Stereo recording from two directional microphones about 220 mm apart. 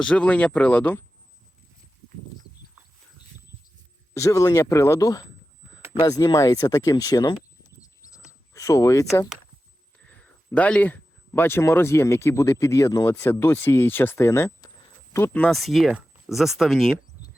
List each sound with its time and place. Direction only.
0.0 s speech: 5° left (ahead or behind)
4.1 s speech: 15° left (ahead or behind)
7.8 s a sound: 15° left (ahead or behind)
10.1 s speech: 5° left (ahead or behind)